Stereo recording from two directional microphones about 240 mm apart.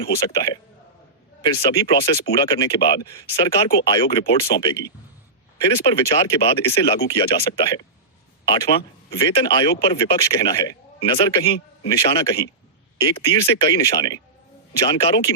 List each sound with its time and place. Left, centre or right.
0.0 s speech: centre